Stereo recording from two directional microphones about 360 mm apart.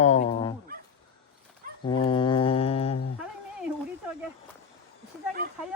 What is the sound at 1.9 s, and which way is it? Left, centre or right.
Mantra, centre.